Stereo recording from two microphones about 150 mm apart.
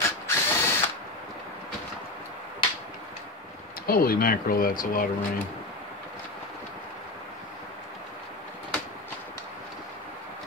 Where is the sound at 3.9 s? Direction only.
75° left (ahead or behind).